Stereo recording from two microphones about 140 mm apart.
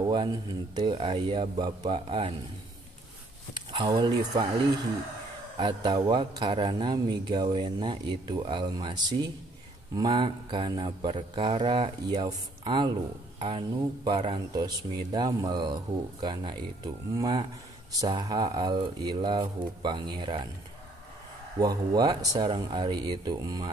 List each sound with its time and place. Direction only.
0.0 s speech: 30° right (ahead or behind)
3.5 s speech: 30° right (ahead or behind)
5.6 s speech: 35° right (ahead or behind)
21.5 s speech: 25° right (ahead or behind)